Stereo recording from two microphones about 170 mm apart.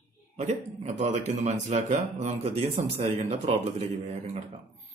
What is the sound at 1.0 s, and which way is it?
Speech, 40° right (ahead or behind).